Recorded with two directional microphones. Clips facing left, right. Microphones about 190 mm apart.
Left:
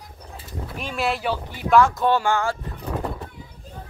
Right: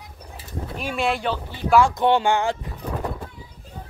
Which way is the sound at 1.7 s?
15° right (ahead or behind).